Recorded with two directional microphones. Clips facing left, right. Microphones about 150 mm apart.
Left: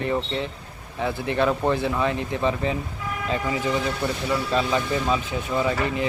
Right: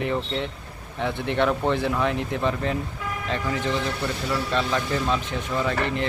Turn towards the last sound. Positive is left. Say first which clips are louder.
# left 1 dB
turn(degrees=5)  # may be behind; listen again after turning